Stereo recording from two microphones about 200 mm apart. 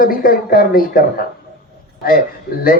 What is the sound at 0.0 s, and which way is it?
Speech, 45° left (ahead or behind).